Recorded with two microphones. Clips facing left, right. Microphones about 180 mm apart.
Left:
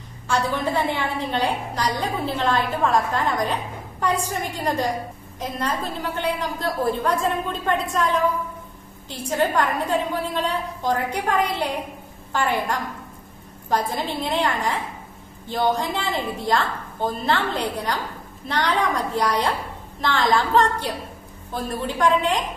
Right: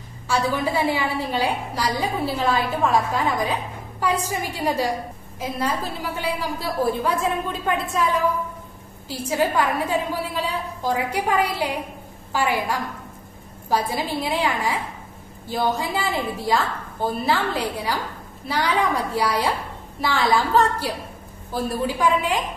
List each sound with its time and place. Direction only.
0.3 s a woman's voice: 5° right (ahead or behind)